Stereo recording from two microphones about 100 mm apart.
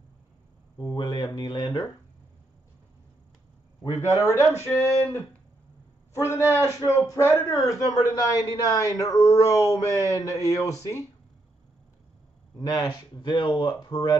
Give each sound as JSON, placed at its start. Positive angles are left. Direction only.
{"t": 0.7, "sound": "speech", "side_deg": 45}
{"t": 4.0, "sound": "a man's voice", "side_deg": 30}
{"t": 12.5, "sound": "speech", "side_deg": 40}